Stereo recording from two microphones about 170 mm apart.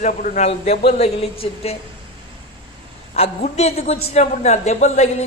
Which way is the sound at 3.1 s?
40° left (ahead or behind).